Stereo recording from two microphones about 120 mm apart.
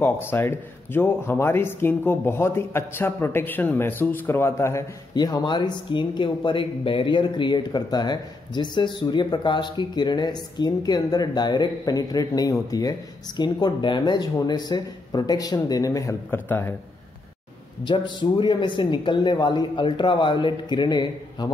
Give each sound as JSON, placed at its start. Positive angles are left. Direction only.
{"t": 0.0, "sound": "speech", "side_deg": 20}
{"t": 5.1, "sound": "speech", "side_deg": 35}
{"t": 16.3, "sound": "a man's voice", "side_deg": 15}
{"t": 17.8, "sound": "speech", "side_deg": 40}